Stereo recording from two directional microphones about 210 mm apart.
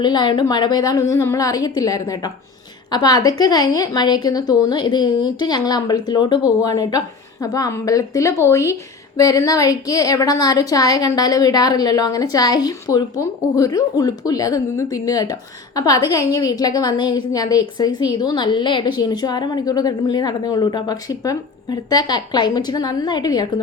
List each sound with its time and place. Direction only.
0.0 s a woman's voice: 20° left (ahead or behind)